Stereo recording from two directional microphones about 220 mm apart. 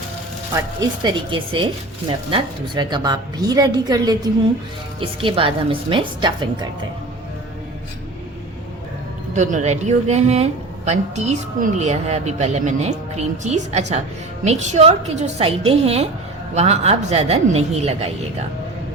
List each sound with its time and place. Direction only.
0.5 s a woman's voice: 20° right (ahead or behind)
9.3 s a woman's voice: 35° right (ahead or behind)